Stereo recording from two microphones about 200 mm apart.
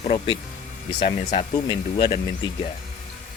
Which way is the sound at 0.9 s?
25° left (ahead or behind).